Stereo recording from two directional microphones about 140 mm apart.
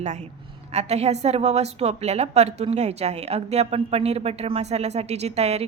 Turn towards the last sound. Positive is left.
turn(degrees=-50)  # may be behind; listen again after turning